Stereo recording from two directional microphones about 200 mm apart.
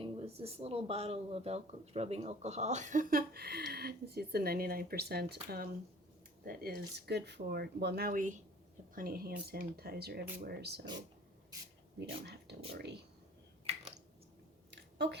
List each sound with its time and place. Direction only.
0.0 s speech: 30° right (ahead or behind); by 10.8 s 55° right (ahead or behind)
11.9 s speech: 55° right (ahead or behind)
14.7 s a sound: 60° right (ahead or behind)